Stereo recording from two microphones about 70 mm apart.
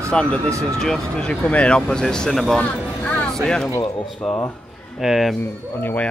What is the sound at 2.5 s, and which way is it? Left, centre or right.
Music, centre.